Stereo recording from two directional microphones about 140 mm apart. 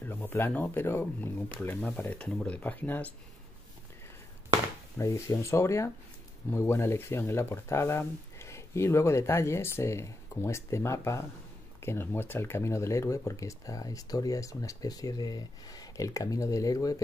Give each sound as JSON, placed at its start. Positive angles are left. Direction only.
{"t": 0.0, "sound": "speech", "side_deg": 15}
{"t": 4.9, "sound": "speech", "side_deg": 20}